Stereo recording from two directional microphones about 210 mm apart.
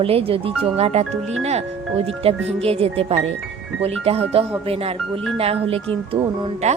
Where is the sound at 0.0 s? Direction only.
25° right (ahead or behind).